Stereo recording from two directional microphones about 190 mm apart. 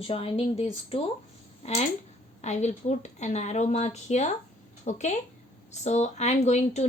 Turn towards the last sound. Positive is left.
turn(degrees=35)  # may be behind; listen again after turning